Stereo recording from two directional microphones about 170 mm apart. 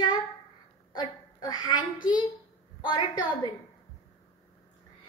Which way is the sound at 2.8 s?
25° left (ahead or behind).